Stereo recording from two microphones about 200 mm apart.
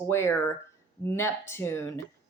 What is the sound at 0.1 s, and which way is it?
Speech, 10° left (ahead or behind).